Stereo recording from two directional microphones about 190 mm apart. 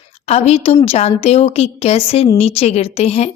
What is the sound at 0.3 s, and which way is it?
A woman's voice, 35° left (ahead or behind).